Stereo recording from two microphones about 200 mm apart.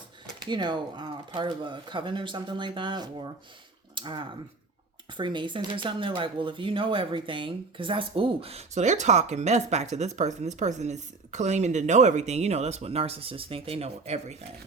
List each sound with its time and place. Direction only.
0.3 s speech: 20° right (ahead or behind)